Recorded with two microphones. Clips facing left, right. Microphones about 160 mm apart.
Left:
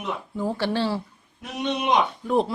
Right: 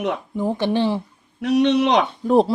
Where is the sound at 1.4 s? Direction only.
70° right (ahead or behind).